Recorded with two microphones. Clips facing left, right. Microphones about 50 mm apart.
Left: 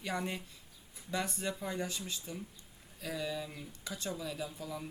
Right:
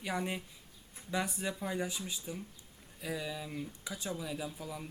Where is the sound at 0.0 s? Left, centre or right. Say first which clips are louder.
Right 1 dB; centre.